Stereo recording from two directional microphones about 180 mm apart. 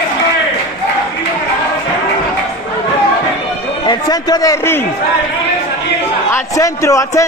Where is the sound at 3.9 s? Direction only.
20° left (ahead or behind).